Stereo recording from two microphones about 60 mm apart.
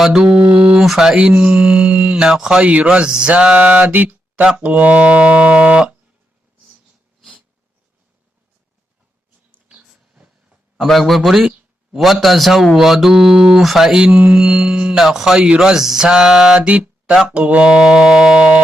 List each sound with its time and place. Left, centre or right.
0.2 s music: centre
0.8 s music: centre
1.4 s music: centre
2.6 s a sound: right
9.6 s a sound: centre
10.8 s a man's voice: centre
12.7 s music: centre
14.1 s a sound: right
14.3 s music: centre
16.6 s mantra: right
17.2 s music: centre